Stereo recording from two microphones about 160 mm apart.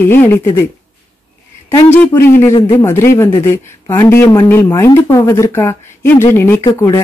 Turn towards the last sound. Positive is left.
turn(degrees=20)  # may be behind; listen again after turning